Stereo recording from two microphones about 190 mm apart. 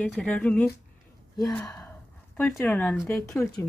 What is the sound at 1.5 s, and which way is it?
Gasp, 5° left (ahead or behind).